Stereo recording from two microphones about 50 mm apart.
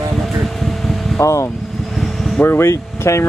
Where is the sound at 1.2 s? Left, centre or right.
Left.